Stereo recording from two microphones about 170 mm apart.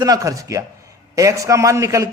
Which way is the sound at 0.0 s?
20° right (ahead or behind).